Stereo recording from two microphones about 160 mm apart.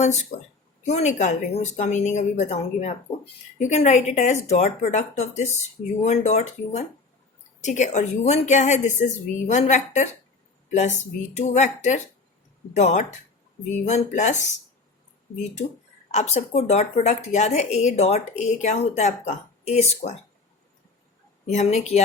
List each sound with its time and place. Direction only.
0.0 s speech: 50° left (ahead or behind)
16.1 s speech: 45° left (ahead or behind)
21.4 s speech: 45° left (ahead or behind)